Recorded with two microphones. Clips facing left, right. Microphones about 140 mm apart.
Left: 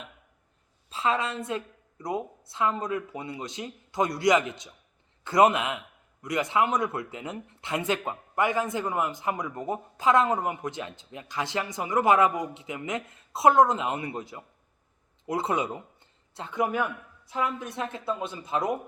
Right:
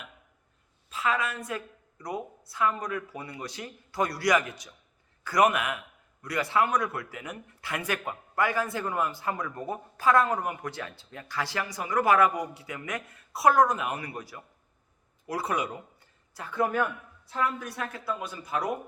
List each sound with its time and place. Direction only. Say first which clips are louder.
0.9 s speech: left 2 dB; 25° left (ahead or behind)